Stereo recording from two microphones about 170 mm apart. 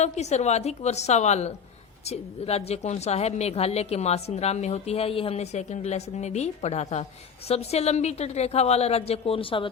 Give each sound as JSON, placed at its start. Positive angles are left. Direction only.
{"t": 0.0, "sound": "a woman's voice", "side_deg": 40}